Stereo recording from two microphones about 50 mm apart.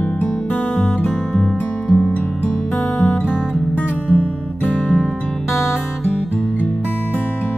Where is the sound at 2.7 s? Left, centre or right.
Left.